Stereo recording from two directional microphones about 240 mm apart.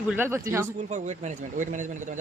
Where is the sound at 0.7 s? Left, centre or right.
Right.